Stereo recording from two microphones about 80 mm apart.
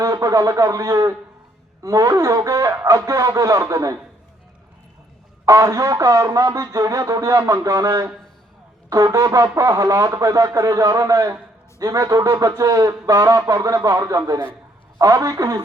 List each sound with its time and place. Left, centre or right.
0.0 s a man's voice: right
5.5 s speech: right